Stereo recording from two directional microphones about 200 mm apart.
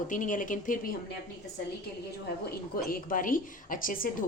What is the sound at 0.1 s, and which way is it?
Speech, 40° left (ahead or behind).